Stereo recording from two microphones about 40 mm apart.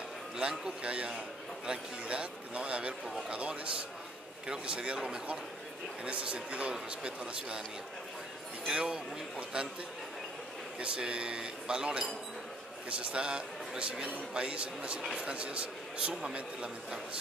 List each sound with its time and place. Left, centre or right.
0.4 s a man's voice: right
8.7 s speech: right
10.8 s speech: right
13.0 s a man's voice: right
16.1 s speech: centre